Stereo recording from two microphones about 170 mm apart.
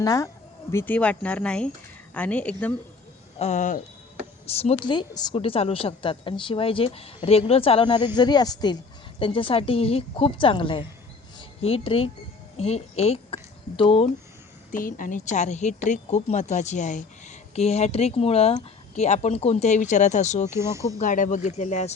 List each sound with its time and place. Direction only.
0.0 s speech: 20° left (ahead or behind)
3.3 s speech: 40° left (ahead or behind)
4.5 s a woman's voice: 35° left (ahead or behind)
14.7 s speech: 55° left (ahead or behind)
20.5 s speech: 15° right (ahead or behind)
21.0 s speech: 50° left (ahead or behind)